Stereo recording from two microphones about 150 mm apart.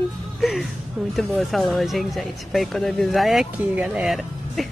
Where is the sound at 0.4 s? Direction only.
Centre (ahead or behind).